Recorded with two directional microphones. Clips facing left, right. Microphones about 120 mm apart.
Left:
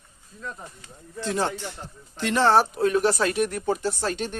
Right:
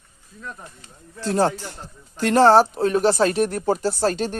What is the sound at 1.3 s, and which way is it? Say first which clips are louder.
Speech: right 6 dB; 40° right (ahead or behind).